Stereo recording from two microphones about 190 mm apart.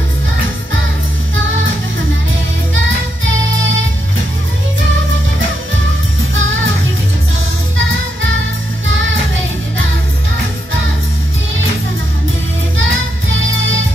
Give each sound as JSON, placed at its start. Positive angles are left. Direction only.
{"t": 7.7, "sound": "music", "side_deg": -80}
{"t": 12.7, "sound": "music", "side_deg": -90}